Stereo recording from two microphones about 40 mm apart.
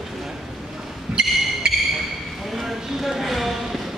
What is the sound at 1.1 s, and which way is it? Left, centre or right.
Music, right.